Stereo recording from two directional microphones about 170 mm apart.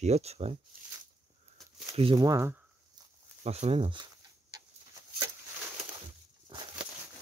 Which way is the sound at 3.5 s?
35° right (ahead or behind).